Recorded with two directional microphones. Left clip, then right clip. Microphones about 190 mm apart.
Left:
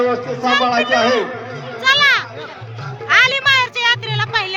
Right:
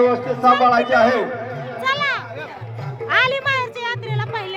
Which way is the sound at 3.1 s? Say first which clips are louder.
Left 5 dB; 15° right (ahead or behind).